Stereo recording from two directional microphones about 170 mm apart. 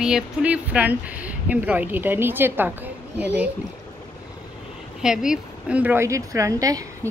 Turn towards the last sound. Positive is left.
turn(degrees=-20)  # may be behind; listen again after turning